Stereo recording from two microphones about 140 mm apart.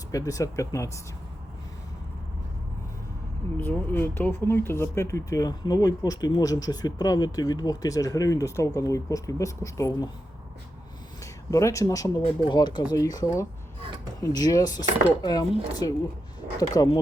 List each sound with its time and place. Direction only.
0.1 s speech: 25° left (ahead or behind)
3.6 s speech: 15° left (ahead or behind)
11.2 s speech: 25° left (ahead or behind)
12.2 s speech: 35° left (ahead or behind)